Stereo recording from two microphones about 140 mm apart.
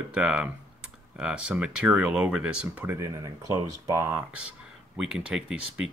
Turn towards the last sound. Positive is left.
turn(degrees=-5)  # may be behind; listen again after turning